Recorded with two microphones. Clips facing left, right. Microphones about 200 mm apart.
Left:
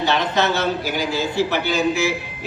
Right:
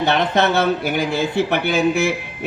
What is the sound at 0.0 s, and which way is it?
Speech, 55° right (ahead or behind).